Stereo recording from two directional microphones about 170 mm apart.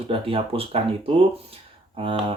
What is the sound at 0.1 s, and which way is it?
Speech, 30° right (ahead or behind).